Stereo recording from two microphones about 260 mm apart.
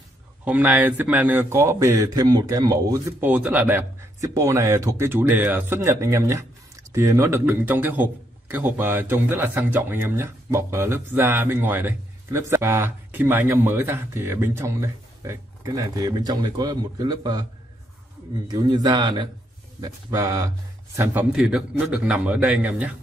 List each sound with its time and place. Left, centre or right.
0.5 s a man's voice: centre
18.5 s a man's voice: centre